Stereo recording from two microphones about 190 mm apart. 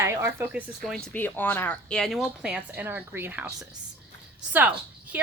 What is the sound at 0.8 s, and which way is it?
Speech, 5° left (ahead or behind).